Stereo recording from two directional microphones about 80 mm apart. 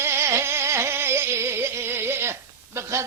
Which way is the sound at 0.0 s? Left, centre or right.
Right.